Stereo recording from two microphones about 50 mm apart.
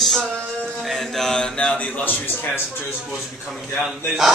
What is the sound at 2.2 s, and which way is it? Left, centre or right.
Speech, left.